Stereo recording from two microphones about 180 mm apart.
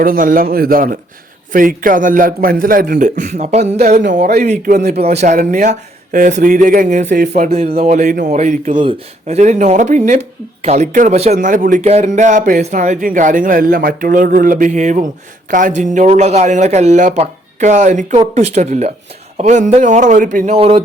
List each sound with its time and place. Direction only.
0.0 s speech: 50° right (ahead or behind)
4.6 s a man's voice: 55° right (ahead or behind)
5.2 s speech: 45° right (ahead or behind)
8.7 s speech: 30° right (ahead or behind)